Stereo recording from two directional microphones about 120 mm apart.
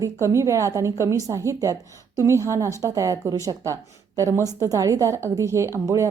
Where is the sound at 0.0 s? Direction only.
25° right (ahead or behind).